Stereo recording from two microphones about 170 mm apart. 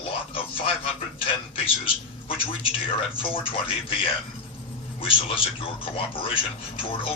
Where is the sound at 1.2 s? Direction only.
30° left (ahead or behind).